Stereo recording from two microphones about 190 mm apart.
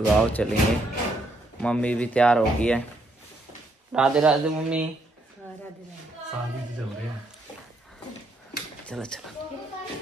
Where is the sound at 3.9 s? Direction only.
5° right (ahead or behind).